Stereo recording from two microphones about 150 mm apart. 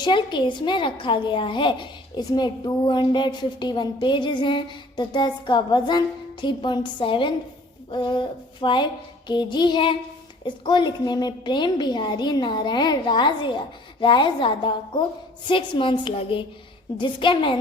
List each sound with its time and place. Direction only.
0.0 s a woman's voice: 30° left (ahead or behind)